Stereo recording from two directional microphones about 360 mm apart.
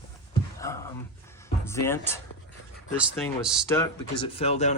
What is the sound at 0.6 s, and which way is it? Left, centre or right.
Speech, centre.